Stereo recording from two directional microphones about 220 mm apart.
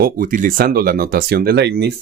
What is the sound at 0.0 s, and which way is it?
Speech, 40° right (ahead or behind).